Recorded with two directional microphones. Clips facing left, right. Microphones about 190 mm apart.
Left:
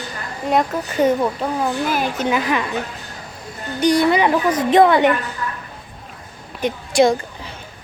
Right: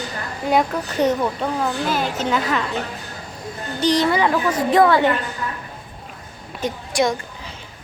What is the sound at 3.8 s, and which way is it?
A woman's voice, 10° left (ahead or behind).